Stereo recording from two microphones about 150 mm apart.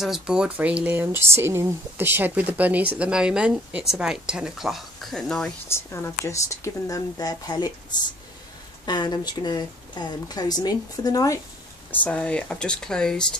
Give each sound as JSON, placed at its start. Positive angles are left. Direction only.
{"t": 0.0, "sound": "speech", "side_deg": -5}
{"t": 5.7, "sound": "speech", "side_deg": 20}
{"t": 11.9, "sound": "speech", "side_deg": 10}